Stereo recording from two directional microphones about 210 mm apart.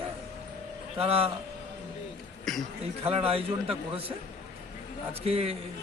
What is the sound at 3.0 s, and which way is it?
Speech, 25° right (ahead or behind).